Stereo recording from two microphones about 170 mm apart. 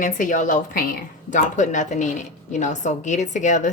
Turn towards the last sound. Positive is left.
turn(degrees=45)  # may be behind; listen again after turning